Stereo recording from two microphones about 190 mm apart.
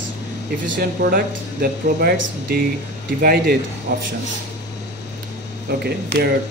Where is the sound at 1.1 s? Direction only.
55° right (ahead or behind).